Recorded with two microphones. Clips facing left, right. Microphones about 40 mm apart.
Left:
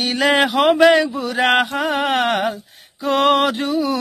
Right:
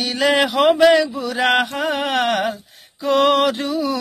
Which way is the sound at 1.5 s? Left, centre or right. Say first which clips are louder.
Left 2 dB; left.